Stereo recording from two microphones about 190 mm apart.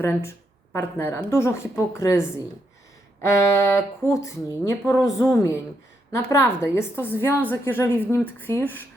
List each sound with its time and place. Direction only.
0.7 s a woman's voice: 10° left (ahead or behind)
3.2 s a woman's voice: 15° left (ahead or behind)